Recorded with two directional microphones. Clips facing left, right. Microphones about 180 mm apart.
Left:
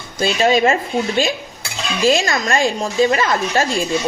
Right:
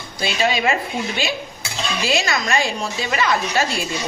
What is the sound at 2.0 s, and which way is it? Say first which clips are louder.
A woman's voice: left 6 dB; 45° left (ahead or behind).